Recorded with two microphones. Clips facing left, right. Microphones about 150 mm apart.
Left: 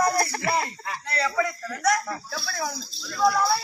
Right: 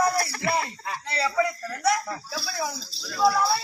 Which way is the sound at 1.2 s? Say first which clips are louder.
Right 1 dB; 10° right (ahead or behind).